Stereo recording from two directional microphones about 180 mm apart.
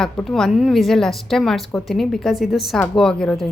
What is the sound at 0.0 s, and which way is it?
A woman's voice, centre (ahead or behind).